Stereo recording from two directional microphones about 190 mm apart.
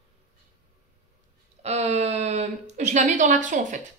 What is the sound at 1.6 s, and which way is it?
Speech, 35° right (ahead or behind).